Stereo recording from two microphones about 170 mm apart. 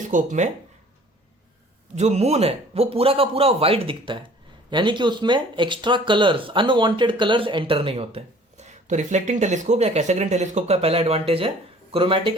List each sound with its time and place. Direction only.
0.0 s speech: 50° right (ahead or behind)
2.0 s speech: 40° right (ahead or behind)